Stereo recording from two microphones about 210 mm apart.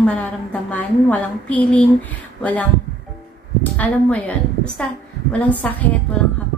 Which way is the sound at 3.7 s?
5° left (ahead or behind).